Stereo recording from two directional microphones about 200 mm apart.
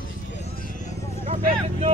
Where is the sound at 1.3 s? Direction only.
35° right (ahead or behind).